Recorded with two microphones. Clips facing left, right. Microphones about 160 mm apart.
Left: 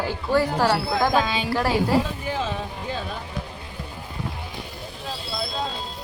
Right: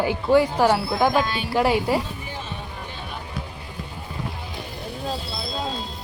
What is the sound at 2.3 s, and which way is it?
Music, 90° left.